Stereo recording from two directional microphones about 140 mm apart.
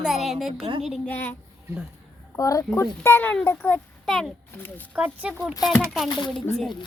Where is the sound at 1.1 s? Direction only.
10° left (ahead or behind).